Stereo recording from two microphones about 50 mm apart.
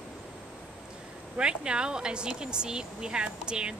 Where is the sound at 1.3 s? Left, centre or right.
Centre.